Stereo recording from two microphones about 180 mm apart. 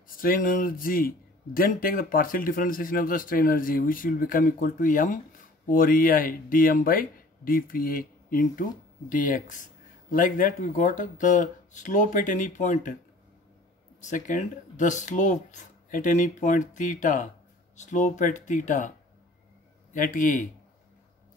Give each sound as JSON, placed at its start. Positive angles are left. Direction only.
{"t": 0.2, "sound": "a man's voice", "side_deg": 50}
{"t": 14.0, "sound": "a man's voice", "side_deg": 45}